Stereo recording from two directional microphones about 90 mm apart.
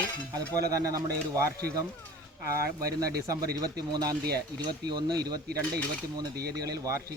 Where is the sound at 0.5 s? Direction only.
40° right (ahead or behind).